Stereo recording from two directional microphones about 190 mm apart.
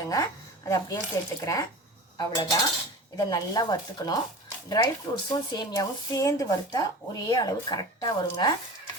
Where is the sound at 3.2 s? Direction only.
20° left (ahead or behind).